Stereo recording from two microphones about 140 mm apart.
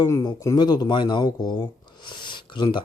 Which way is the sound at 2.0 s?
35° left (ahead or behind).